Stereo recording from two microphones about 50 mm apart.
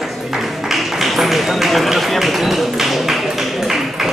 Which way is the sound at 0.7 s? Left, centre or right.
Centre.